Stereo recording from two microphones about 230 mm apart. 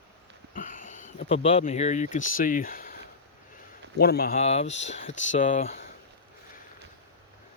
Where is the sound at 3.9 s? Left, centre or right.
Left.